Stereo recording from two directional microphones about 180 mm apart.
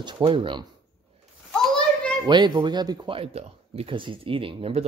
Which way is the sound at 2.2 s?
25° right (ahead or behind).